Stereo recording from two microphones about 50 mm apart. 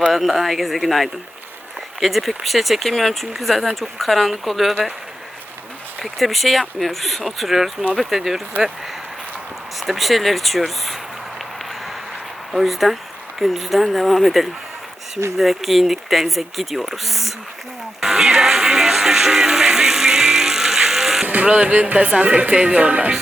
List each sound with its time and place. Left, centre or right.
0.1 s speech: centre
6.1 s speech: centre
9.8 s speech: centre
12.5 s speech: centre
18.0 s music: centre
21.2 s speech: right